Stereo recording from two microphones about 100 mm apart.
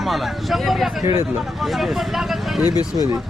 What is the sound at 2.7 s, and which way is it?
Speech, 45° left (ahead or behind).